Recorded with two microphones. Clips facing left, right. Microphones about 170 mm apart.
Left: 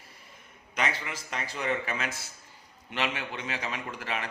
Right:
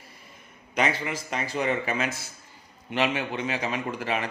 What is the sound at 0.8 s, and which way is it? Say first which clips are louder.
A man's voice: right 6 dB; 15° right (ahead or behind).